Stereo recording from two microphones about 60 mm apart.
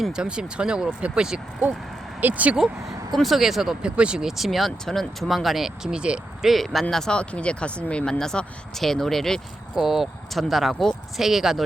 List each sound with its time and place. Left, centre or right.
0.1 s speech: centre
2.2 s speech: right
2.8 s speech: centre
6.4 s speech: centre
6.9 s speech: centre
8.2 s speech: centre
9.7 s speech: centre